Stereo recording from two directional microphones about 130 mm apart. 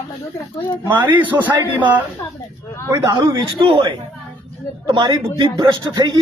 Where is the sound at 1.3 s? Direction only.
25° right (ahead or behind).